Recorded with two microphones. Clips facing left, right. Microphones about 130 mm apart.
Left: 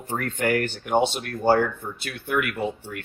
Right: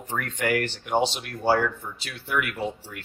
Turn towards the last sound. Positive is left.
turn(degrees=60)  # may be behind; listen again after turning